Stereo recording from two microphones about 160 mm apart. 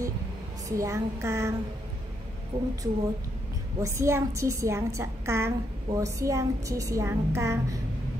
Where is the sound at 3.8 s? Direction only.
20° right (ahead or behind).